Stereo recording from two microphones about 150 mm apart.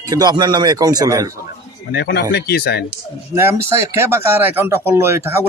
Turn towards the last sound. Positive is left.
turn(degrees=-15)  # may be behind; listen again after turning